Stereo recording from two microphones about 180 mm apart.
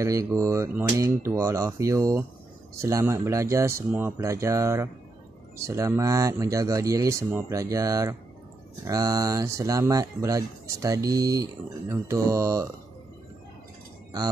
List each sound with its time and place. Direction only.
0.0 s speech: 20° right (ahead or behind)